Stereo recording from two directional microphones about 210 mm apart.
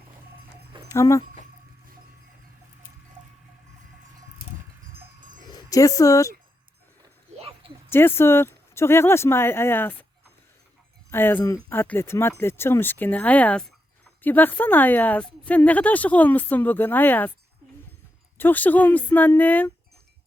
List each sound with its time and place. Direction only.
0.9 s speech: 15° left (ahead or behind)
5.5 s speech: 15° left (ahead or behind)
7.3 s a sound: 25° right (ahead or behind)
7.9 s a woman's voice: 10° left (ahead or behind)
11.1 s a woman's voice: 10° left (ahead or behind)
18.3 s a woman's voice: 10° left (ahead or behind)